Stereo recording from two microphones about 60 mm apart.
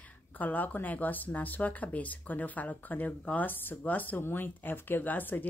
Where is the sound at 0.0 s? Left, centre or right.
Left.